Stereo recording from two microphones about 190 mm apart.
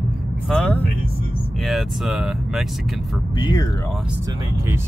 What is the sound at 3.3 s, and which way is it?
Speech, 20° left (ahead or behind).